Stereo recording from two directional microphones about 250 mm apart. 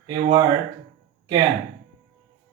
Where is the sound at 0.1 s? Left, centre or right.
Centre.